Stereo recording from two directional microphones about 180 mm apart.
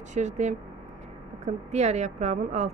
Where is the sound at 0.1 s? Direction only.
40° right (ahead or behind).